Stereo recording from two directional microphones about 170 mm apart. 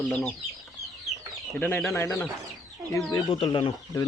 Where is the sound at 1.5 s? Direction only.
5° left (ahead or behind).